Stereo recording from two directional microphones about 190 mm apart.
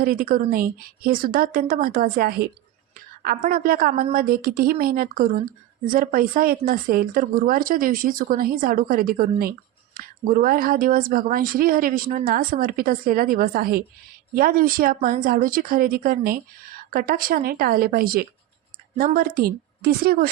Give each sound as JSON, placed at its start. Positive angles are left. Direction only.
{"t": 0.0, "sound": "speech", "side_deg": -50}